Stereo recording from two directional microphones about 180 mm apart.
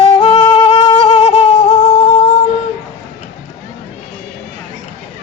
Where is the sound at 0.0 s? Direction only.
30° left (ahead or behind).